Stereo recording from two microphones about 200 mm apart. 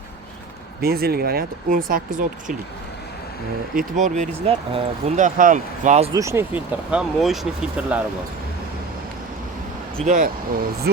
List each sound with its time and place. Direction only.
0.8 s speech: 50° right (ahead or behind)
3.8 s speech: 35° right (ahead or behind)
6.1 s speech: 15° right (ahead or behind)
10.0 s speech: 40° right (ahead or behind)
10.9 s speech: 50° right (ahead or behind)